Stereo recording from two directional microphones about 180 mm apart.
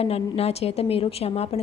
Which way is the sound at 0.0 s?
35° left (ahead or behind).